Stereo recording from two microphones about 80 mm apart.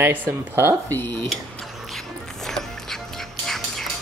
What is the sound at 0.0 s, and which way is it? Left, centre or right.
Speech, right.